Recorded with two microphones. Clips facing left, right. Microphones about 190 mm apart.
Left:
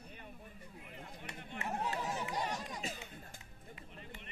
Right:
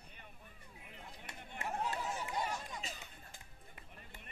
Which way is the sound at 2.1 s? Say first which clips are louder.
Left 1 dB; 40° left (ahead or behind).